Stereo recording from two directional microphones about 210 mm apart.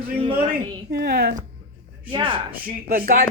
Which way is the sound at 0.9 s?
50° right (ahead or behind).